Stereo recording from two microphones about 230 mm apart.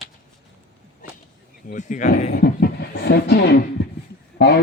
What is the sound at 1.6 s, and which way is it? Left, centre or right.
Speech, left.